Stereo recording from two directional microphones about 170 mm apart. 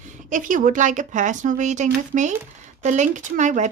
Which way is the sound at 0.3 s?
50° right (ahead or behind).